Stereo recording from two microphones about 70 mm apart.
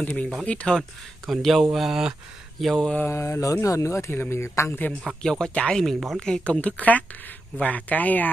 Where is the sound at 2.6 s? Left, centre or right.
Centre.